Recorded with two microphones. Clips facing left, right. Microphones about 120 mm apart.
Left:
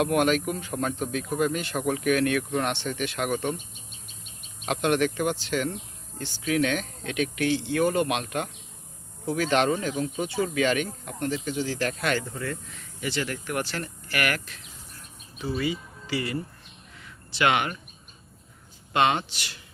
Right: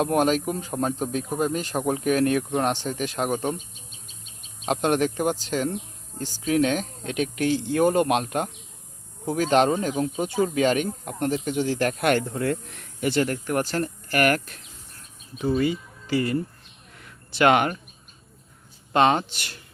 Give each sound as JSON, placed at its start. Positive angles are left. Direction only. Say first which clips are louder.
{"t": 0.0, "sound": "speech", "louder": "right 1 dB", "side_deg": -35}
{"t": 4.6, "sound": "speech", "louder": "right 2 dB", "side_deg": -40}
{"t": 17.0, "sound": "a sound", "louder": "right 5 dB", "side_deg": -45}
{"t": 18.9, "sound": "speech", "louder": "right 4 dB", "side_deg": -40}